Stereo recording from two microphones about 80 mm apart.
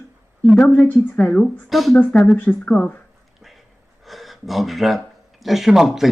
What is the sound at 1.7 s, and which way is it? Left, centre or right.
Speech, centre.